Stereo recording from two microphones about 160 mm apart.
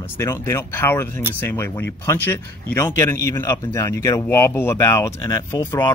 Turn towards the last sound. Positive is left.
turn(degrees=15)  # may be behind; listen again after turning